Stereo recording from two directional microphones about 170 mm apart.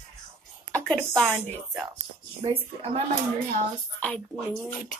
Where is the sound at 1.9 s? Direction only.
30° right (ahead or behind).